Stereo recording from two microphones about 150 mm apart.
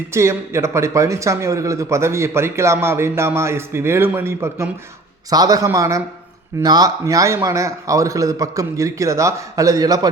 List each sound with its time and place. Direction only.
0.1 s a man's voice: 20° right (ahead or behind)